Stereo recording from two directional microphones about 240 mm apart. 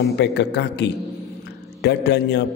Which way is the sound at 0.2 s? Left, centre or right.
Left.